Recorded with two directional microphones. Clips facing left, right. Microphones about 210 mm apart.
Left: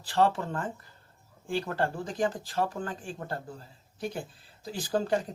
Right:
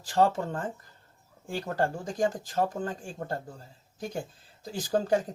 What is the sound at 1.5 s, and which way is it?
Speech, 40° right (ahead or behind).